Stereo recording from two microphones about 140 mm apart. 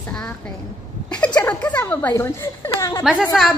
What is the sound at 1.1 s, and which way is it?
Speech, 10° left (ahead or behind).